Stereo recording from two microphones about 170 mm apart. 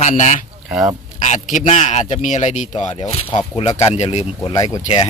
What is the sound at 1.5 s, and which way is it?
Speech, 45° left (ahead or behind).